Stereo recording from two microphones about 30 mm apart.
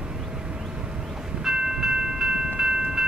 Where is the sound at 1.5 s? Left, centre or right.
Centre.